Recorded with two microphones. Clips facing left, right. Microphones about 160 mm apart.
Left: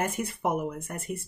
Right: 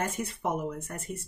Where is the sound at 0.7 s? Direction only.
10° left (ahead or behind).